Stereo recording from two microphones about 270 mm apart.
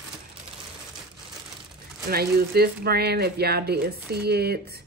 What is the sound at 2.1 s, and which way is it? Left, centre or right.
Speech, right.